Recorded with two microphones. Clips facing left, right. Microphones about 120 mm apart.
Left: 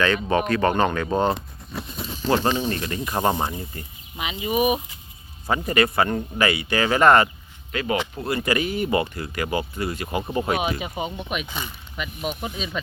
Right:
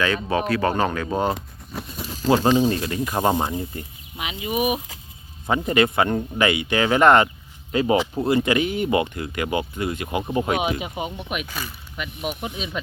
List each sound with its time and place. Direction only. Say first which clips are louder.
0.3 s speech: left 1 dB; 5° right (ahead or behind)
5.5 s speech: right 2 dB; 15° right (ahead or behind)
6.1 s speech: right 2 dB; 5° right (ahead or behind)
6.4 s speech: right 1 dB; 15° right (ahead or behind)
7.7 s speech: right 5 dB; 25° right (ahead or behind)
10.2 s speech: right 3 dB; centre (ahead or behind)
10.5 s speech: right 1 dB; 15° right (ahead or behind)